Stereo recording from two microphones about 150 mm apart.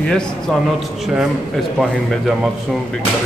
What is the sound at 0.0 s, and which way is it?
A man's voice, 5° left (ahead or behind).